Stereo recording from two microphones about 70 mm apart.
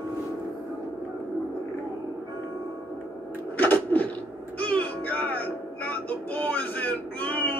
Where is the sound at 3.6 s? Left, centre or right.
Left.